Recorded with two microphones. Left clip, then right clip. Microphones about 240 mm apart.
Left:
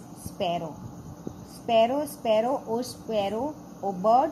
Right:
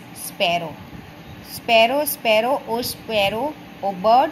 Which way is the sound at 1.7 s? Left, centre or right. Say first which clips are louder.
Right 7 dB; right.